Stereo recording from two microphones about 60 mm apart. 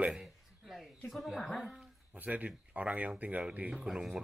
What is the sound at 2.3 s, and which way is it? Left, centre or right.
Speech, right.